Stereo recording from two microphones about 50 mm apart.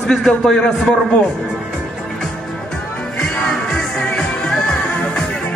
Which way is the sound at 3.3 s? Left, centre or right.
Centre.